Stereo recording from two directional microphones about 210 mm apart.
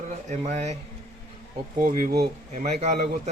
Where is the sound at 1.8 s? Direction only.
40° right (ahead or behind).